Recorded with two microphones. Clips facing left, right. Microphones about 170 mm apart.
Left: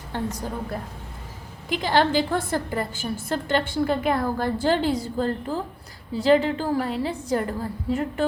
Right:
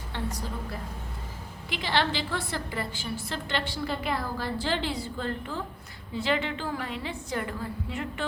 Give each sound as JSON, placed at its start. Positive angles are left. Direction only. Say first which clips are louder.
{"t": 0.1, "sound": "a woman's voice", "louder": "left 5 dB", "side_deg": 45}